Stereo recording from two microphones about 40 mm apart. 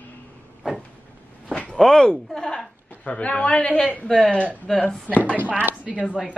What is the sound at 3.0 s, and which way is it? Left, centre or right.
Speech, left.